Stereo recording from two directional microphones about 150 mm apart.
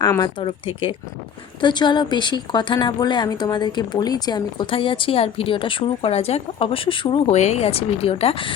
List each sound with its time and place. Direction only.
0.0 s a woman's voice: 25° left (ahead or behind)
7.3 s a woman's voice: 50° left (ahead or behind)